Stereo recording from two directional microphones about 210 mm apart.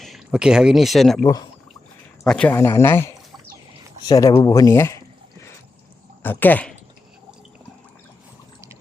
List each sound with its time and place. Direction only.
0.0 s speech: centre (ahead or behind)
1.2 s speech: 15° left (ahead or behind)
2.2 s speech: 5° left (ahead or behind)
4.1 s speech: 15° left (ahead or behind)
6.2 s speech: 10° left (ahead or behind)